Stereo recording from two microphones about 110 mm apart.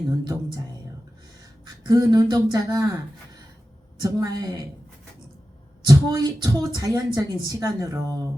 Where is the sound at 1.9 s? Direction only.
35° right (ahead or behind).